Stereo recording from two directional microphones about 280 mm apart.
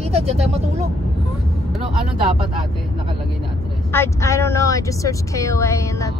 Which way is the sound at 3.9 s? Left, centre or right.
Centre.